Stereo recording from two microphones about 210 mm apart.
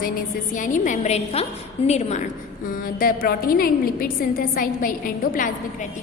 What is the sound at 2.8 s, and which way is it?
A woman's voice, 45° left (ahead or behind).